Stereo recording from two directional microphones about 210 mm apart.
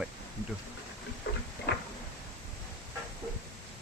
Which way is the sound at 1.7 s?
45° left (ahead or behind).